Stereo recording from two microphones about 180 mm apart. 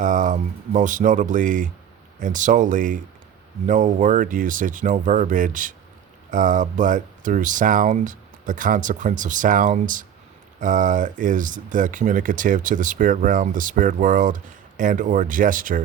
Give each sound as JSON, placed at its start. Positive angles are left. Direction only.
{"t": 0.0, "sound": "speech", "side_deg": -45}